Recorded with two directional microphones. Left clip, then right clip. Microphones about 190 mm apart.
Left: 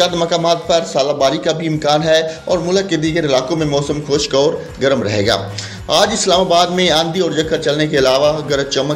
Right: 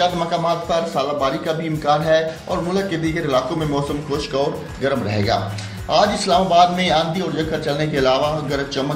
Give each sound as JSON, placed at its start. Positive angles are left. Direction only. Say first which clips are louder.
{"t": 0.0, "sound": "a man's voice", "louder": "left 4 dB", "side_deg": 55}